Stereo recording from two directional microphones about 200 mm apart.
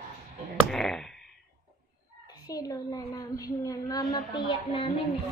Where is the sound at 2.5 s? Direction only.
15° left (ahead or behind).